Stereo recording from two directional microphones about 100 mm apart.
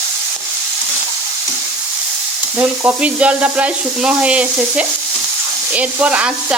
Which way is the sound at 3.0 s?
10° right (ahead or behind).